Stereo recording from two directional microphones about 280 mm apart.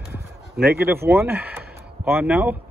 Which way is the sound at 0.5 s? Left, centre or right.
Right.